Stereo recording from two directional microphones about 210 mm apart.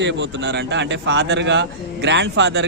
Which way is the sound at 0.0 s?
55° right (ahead or behind).